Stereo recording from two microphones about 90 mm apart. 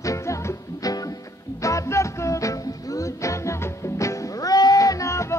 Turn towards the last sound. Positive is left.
turn(degrees=35)  # may be behind; listen again after turning